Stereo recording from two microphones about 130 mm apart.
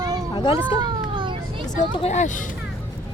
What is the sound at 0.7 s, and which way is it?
Children playing, 35° right (ahead or behind).